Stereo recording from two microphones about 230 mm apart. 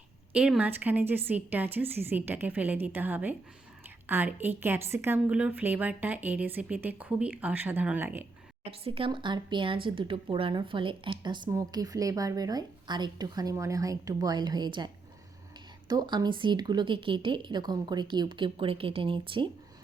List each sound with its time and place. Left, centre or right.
0.3 s a woman's voice: centre
8.7 s speech: right
15.9 s speech: centre